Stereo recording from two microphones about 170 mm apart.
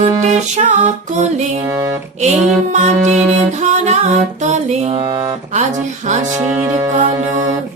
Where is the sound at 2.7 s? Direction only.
45° right (ahead or behind); by 5.4 s 25° right (ahead or behind).